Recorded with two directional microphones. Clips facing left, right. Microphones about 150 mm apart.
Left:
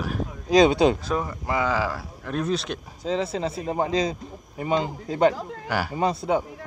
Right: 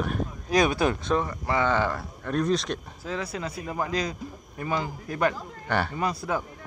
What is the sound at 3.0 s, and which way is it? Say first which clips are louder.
Speech: left 11 dB; 20° left (ahead or behind).